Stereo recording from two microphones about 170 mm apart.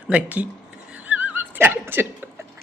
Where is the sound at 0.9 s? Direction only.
10° right (ahead or behind).